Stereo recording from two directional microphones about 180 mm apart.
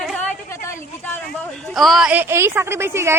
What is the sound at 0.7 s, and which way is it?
A woman's voice, 15° left (ahead or behind).